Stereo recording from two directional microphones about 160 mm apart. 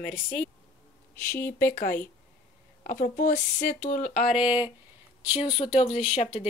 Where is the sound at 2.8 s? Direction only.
70° left (ahead or behind); by 4.3 s 45° left (ahead or behind).